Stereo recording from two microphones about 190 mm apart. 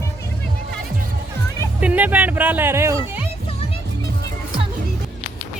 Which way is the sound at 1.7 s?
10° right (ahead or behind).